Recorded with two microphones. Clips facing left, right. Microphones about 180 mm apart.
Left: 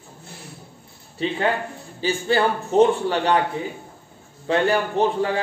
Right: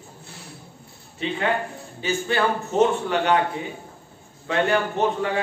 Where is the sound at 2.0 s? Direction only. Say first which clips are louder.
Left 3 dB; 30° left (ahead or behind).